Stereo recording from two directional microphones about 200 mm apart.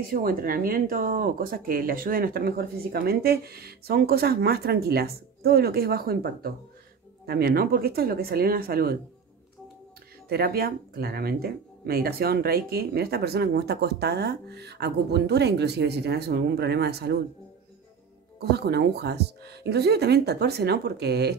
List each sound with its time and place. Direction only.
0.1 s speech: 45° right (ahead or behind)
10.2 s speech: 50° right (ahead or behind)
18.4 s speech: 55° right (ahead or behind)